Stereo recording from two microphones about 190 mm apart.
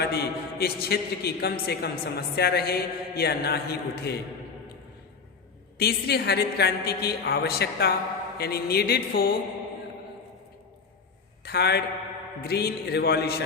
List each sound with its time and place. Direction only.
0.0 s a man's voice: 55° left (ahead or behind)
5.7 s a man's voice: 55° left (ahead or behind)
11.4 s a man's voice: 60° left (ahead or behind)